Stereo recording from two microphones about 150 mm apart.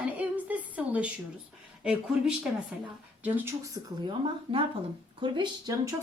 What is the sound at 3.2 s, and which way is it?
Speech, 15° right (ahead or behind).